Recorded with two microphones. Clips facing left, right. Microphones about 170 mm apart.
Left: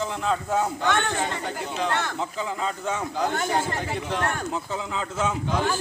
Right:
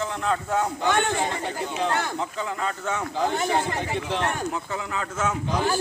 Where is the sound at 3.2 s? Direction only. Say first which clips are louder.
Right 2 dB; centre (ahead or behind).